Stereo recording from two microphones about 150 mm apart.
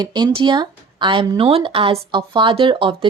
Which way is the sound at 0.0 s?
30° right (ahead or behind).